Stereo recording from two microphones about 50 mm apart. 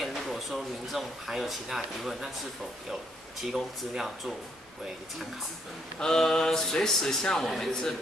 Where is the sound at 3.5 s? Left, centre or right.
Centre.